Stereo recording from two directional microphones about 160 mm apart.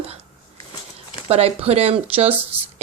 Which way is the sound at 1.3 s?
40° right (ahead or behind).